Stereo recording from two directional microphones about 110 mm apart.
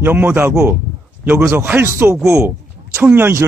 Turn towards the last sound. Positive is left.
turn(degrees=-20)  # may be behind; listen again after turning